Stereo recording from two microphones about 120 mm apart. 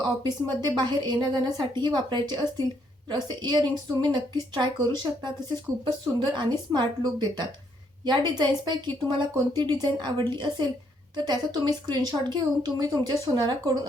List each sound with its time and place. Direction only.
0.0 s speech: 35° right (ahead or behind)